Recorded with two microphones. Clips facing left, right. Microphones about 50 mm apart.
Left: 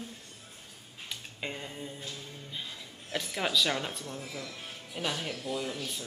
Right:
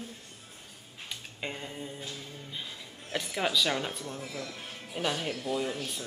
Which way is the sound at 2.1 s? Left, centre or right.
Centre.